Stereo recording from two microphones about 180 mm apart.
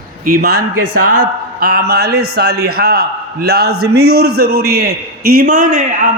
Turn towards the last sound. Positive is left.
turn(degrees=-50)  # may be behind; listen again after turning